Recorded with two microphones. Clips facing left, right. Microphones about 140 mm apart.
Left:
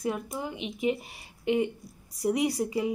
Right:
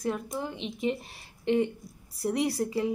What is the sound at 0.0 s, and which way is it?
Speech, 5° left (ahead or behind).